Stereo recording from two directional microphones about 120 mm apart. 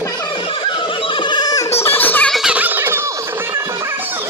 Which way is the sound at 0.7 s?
45° left (ahead or behind).